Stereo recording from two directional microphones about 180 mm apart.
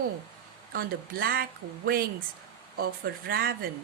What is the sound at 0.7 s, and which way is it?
Speech, 60° right (ahead or behind).